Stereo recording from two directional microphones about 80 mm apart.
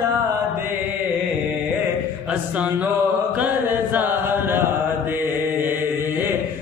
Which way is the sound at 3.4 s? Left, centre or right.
Right.